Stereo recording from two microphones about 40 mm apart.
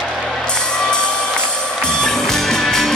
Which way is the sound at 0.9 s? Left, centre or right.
Left.